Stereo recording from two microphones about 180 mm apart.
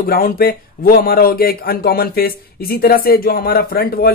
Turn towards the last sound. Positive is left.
turn(degrees=55)  # may be behind; listen again after turning